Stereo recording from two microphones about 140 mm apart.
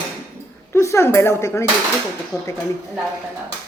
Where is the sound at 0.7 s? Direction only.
20° left (ahead or behind).